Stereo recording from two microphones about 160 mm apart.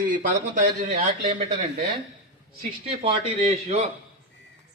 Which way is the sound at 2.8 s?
35° right (ahead or behind).